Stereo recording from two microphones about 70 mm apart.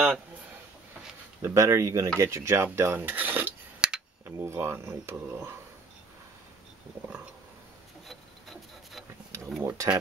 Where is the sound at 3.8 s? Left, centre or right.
Centre.